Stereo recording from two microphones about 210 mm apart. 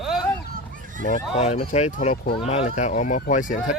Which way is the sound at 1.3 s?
30° left (ahead or behind).